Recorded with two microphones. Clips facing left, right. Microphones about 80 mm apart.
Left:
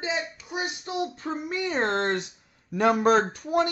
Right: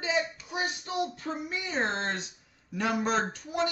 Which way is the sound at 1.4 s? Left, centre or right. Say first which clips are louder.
Left 5 dB; left.